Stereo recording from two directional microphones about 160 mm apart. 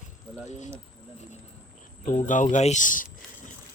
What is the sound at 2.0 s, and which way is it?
Speech, 50° left (ahead or behind).